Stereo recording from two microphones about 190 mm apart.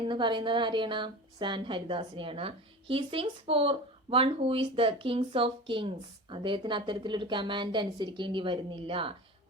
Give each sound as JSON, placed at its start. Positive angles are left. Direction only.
{"t": 0.1, "sound": "a woman's voice", "side_deg": -25}